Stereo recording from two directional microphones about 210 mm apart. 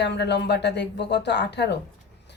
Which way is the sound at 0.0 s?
55° left (ahead or behind).